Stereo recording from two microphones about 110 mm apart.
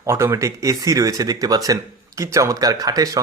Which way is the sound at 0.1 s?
25° right (ahead or behind).